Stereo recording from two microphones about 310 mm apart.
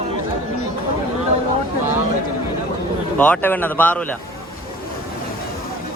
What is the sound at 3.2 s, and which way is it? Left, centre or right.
A man's voice, centre.